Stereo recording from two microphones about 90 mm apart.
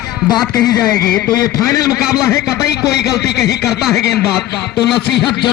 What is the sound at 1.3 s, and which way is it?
Speech, 40° left (ahead or behind).